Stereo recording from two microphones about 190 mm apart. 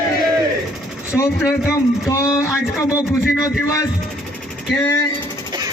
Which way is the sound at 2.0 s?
15° left (ahead or behind).